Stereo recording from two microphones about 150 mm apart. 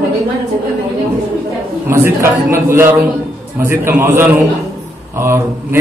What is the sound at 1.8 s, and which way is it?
A man's voice, 15° right (ahead or behind).